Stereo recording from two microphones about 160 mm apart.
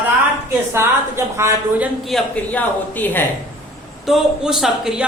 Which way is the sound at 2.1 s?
5° left (ahead or behind).